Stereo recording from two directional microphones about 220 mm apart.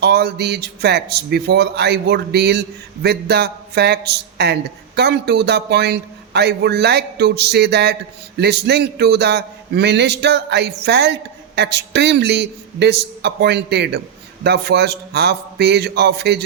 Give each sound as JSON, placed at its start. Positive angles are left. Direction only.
{"t": 0.0, "sound": "a man's voice", "side_deg": -45}